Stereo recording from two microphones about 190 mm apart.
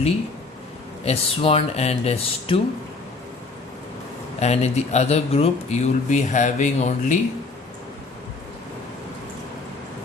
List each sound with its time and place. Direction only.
1.0 s speech: 30° left (ahead or behind)
4.4 s speech: 35° left (ahead or behind)